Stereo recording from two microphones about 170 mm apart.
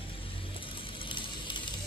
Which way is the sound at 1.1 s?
30° left (ahead or behind).